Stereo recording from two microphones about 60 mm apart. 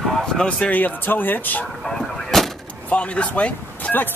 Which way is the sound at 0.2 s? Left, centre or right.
Centre.